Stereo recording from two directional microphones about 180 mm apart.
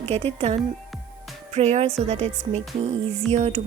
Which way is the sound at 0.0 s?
35° right (ahead or behind).